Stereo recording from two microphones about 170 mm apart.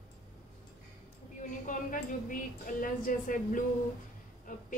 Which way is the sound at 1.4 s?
50° left (ahead or behind).